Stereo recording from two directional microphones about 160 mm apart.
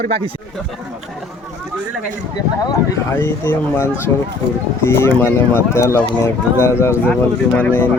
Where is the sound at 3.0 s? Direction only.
15° left (ahead or behind).